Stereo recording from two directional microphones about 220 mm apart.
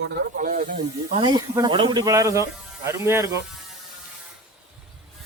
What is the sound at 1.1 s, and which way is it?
Speech, 20° right (ahead or behind).